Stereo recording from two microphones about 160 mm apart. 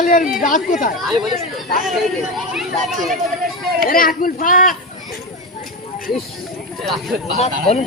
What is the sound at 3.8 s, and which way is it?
Speech, 60° left (ahead or behind).